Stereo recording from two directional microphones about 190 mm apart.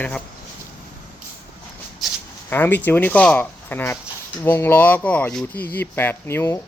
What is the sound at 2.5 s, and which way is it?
Speech, 10° left (ahead or behind).